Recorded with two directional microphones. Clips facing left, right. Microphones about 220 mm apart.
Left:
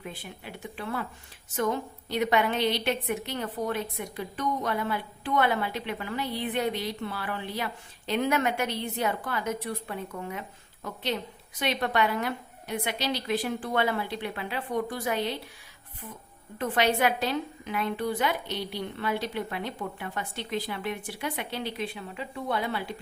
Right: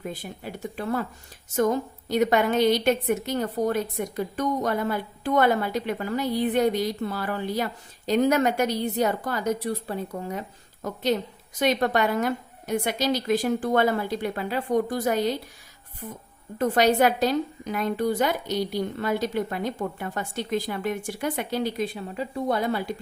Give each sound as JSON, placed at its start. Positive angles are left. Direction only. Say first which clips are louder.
{"t": 0.0, "sound": "a woman's voice", "louder": "right 6 dB", "side_deg": -40}